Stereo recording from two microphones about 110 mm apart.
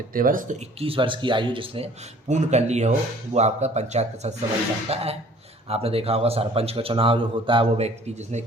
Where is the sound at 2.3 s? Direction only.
90° right.